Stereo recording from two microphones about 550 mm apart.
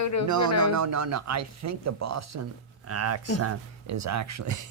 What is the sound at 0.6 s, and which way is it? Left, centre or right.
Speech, right.